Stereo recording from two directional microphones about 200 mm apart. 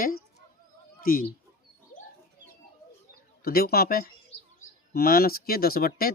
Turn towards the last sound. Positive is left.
turn(degrees=50)  # may be behind; listen again after turning